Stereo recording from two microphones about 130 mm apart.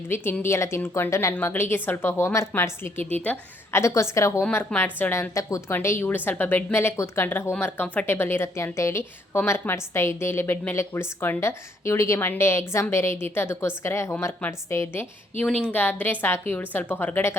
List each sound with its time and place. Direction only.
0.1 s a woman's voice: 20° left (ahead or behind)